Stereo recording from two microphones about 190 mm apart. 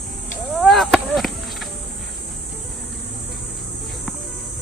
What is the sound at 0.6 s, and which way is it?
Chop, centre (ahead or behind).